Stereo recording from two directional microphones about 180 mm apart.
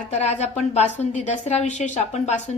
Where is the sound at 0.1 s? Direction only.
35° left (ahead or behind).